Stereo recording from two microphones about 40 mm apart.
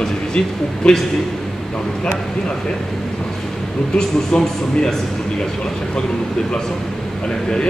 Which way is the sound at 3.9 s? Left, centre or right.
Centre.